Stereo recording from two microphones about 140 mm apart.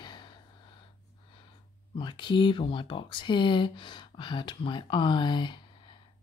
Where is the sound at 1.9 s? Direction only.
35° left (ahead or behind).